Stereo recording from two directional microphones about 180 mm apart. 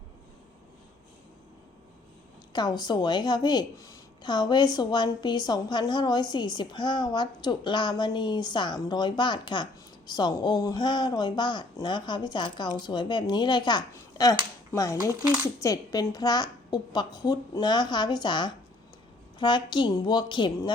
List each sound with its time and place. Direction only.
2.5 s speech: 20° left (ahead or behind)